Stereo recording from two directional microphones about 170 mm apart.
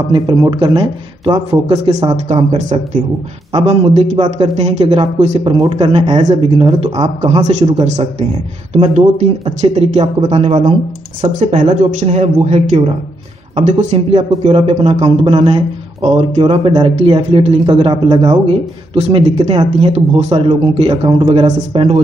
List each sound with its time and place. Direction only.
0.1 s speech: 25° right (ahead or behind)